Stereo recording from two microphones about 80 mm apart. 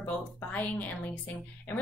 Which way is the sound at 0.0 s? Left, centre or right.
Centre.